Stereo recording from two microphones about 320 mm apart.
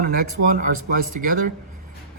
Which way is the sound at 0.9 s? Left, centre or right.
Right.